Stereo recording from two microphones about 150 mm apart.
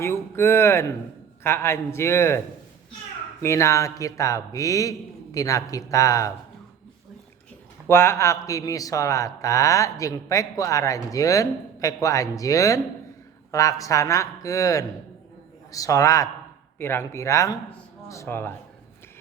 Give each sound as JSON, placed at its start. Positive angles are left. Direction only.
{"t": 0.0, "sound": "a man's voice", "side_deg": 15}
{"t": 3.4, "sound": "speech", "side_deg": 20}
{"t": 7.9, "sound": "a man's voice", "side_deg": 15}